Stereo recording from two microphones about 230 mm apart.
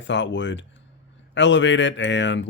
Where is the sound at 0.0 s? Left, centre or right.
Left.